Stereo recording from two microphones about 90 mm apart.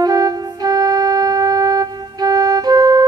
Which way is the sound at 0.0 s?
45° right (ahead or behind).